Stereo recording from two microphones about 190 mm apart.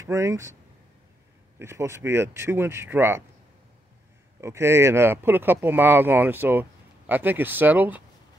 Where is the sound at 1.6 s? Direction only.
15° right (ahead or behind).